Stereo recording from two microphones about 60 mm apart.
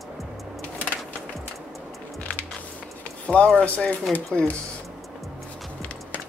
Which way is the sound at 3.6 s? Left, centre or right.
Left.